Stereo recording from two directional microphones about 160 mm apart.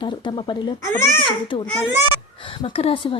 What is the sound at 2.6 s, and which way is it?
Speech, 35° left (ahead or behind).